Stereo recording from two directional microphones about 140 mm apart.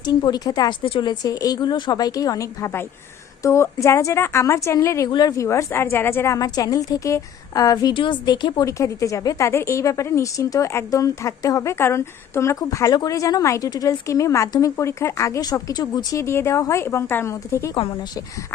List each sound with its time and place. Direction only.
0.0 s a woman's voice: 30° left (ahead or behind)